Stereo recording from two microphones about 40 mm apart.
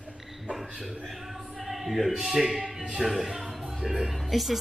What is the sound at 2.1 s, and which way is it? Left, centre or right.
Speech, centre.